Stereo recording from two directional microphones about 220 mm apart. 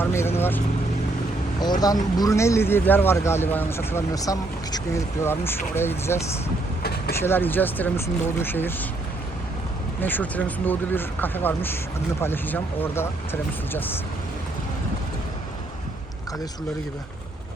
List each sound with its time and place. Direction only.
0.0 s speech: 10° left (ahead or behind)
1.6 s speech: 20° left (ahead or behind)
7.2 s speech: 10° left (ahead or behind)
10.0 s speech: 10° left (ahead or behind)